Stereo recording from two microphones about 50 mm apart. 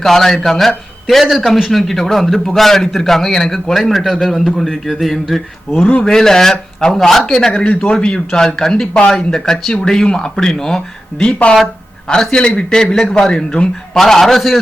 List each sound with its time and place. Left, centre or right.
0.0 s speech: centre; by 9.1 s left
9.1 s speech: centre